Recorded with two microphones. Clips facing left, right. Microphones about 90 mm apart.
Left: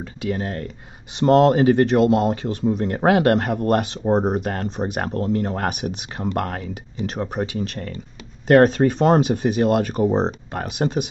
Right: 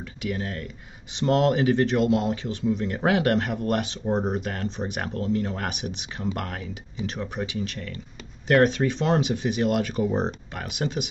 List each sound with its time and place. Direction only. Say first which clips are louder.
0.0 s speech: left 5 dB; 40° left (ahead or behind)
6.6 s speech: left 4 dB; 50° left (ahead or behind)